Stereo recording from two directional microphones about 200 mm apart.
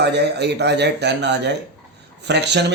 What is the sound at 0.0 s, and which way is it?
A man's voice, 55° right (ahead or behind).